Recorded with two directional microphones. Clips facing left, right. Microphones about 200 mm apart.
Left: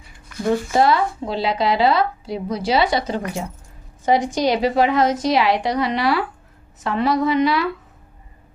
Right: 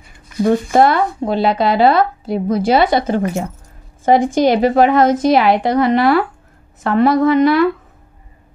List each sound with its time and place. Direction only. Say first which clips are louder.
0.4 s speech: right 5 dB; 55° right (ahead or behind)